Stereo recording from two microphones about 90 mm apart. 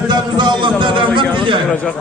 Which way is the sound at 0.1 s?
55° right (ahead or behind).